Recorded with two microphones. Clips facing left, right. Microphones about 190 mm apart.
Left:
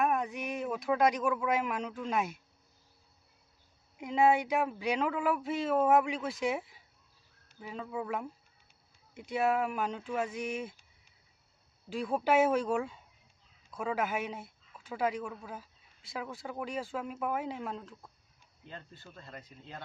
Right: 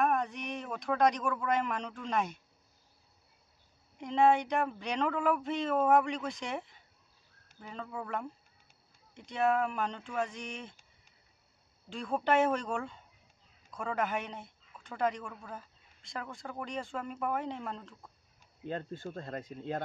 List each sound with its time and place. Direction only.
0.0 s speech: 5° left (ahead or behind)
4.0 s speech: 5° left (ahead or behind)
11.9 s speech: 5° left (ahead or behind)
18.7 s speech: 50° right (ahead or behind)